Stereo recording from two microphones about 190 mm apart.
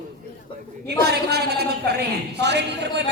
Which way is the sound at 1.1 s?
60° right (ahead or behind).